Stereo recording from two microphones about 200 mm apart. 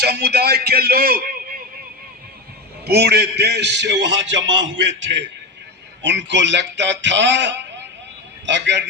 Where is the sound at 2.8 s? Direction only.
55° right (ahead or behind).